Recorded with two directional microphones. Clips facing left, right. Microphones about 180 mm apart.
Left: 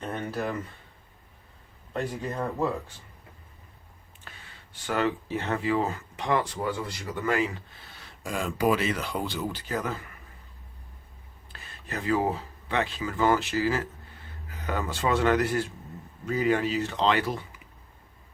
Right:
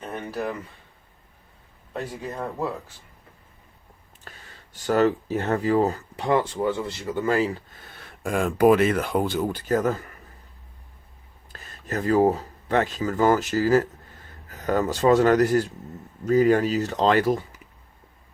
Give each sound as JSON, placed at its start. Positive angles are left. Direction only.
{"t": 0.0, "sound": "a sound", "side_deg": -10}
{"t": 1.9, "sound": "speech", "side_deg": -5}
{"t": 4.2, "sound": "speech", "side_deg": -40}
{"t": 7.9, "sound": "speech", "side_deg": -55}
{"t": 11.5, "sound": "speech", "side_deg": -40}